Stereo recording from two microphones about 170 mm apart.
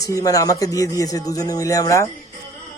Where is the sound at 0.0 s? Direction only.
20° left (ahead or behind).